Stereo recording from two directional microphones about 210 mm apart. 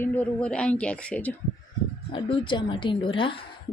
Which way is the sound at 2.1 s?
25° left (ahead or behind).